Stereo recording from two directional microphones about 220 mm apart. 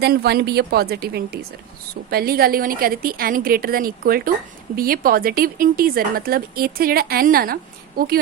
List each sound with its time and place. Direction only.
0.0 s speech: 45° right (ahead or behind)